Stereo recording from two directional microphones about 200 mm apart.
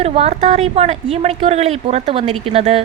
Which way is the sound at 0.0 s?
30° right (ahead or behind).